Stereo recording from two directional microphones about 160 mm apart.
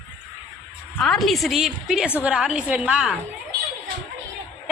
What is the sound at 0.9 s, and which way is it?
A woman's voice, centre (ahead or behind).